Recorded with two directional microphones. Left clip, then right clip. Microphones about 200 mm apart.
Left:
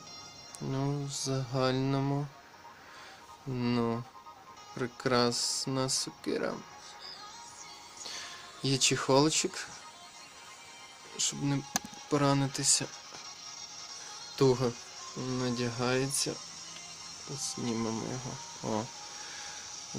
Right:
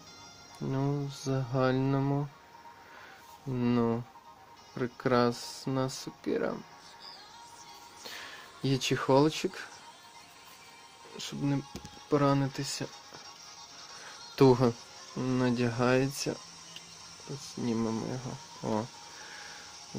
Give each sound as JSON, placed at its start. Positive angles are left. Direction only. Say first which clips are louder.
{"t": 0.7, "sound": "speech", "louder": "right 1 dB", "side_deg": -15}
{"t": 3.5, "sound": "speech", "louder": "right 2 dB", "side_deg": -15}
{"t": 8.6, "sound": "speech", "louder": "left 1 dB", "side_deg": -20}
{"t": 11.2, "sound": "speech", "louder": "left 1 dB", "side_deg": -15}
{"t": 14.3, "sound": "speech", "louder": "right 4 dB", "side_deg": -35}
{"t": 15.2, "sound": "speech", "louder": "right 4 dB", "side_deg": -20}